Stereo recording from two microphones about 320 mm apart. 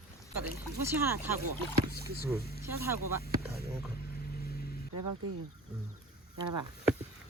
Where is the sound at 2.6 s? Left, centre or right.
Centre.